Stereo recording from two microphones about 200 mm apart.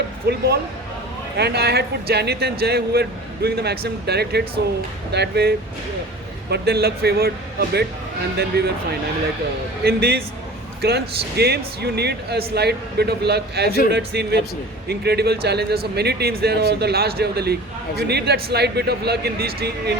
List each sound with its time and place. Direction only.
0.3 s a man's voice: 55° right (ahead or behind)
9.8 s a man's voice: 55° right (ahead or behind)